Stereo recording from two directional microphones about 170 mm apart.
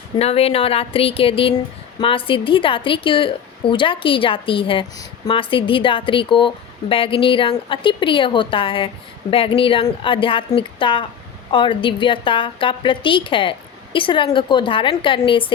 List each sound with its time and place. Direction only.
0.2 s a woman's voice: 35° left (ahead or behind)